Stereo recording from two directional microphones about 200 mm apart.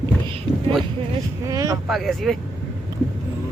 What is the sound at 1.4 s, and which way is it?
Speech, 15° right (ahead or behind).